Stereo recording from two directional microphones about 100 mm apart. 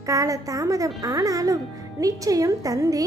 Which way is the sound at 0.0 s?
35° right (ahead or behind).